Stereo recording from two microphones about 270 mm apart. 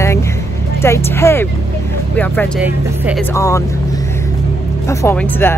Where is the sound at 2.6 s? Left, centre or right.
Centre.